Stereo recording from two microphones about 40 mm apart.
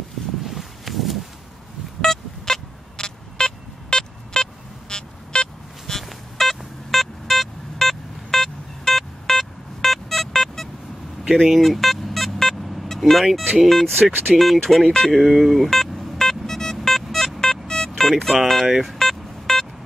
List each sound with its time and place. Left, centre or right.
0.4 s a sound: centre
2.0 s vehicle: centre
5.9 s a sound: centre
11.3 s speech: centre
11.6 s vehicle: centre
13.0 s speech: centre
13.7 s speech: centre
15.1 s speech: centre
16.2 s a sound: centre
16.8 s music: centre
18.3 s speech: centre
18.8 s a sound: centre